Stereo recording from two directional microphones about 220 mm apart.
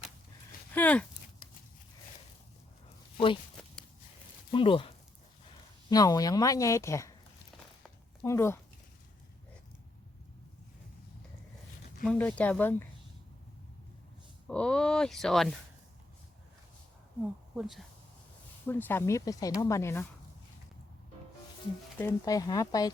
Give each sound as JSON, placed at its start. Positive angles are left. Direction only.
{"t": 0.7, "sound": "speech", "side_deg": 5}
{"t": 4.5, "sound": "speech", "side_deg": 25}
{"t": 8.2, "sound": "speech", "side_deg": 10}
{"t": 12.0, "sound": "speech", "side_deg": 5}
{"t": 14.4, "sound": "speech", "side_deg": 5}
{"t": 17.6, "sound": "speech", "side_deg": 0}
{"t": 21.9, "sound": "speech", "side_deg": 15}